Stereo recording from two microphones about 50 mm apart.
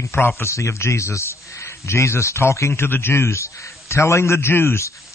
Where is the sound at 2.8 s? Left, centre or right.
Left.